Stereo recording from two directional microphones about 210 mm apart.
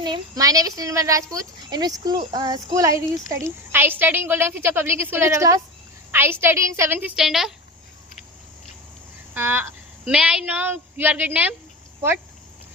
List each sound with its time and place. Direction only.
0.0 s speech: 20° right (ahead or behind); by 7.5 s centre (ahead or behind)
9.3 s speech: 10° right (ahead or behind)